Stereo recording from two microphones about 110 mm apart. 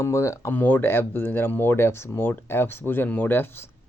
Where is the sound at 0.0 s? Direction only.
25° left (ahead or behind).